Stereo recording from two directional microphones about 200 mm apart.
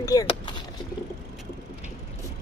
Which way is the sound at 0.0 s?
15° left (ahead or behind).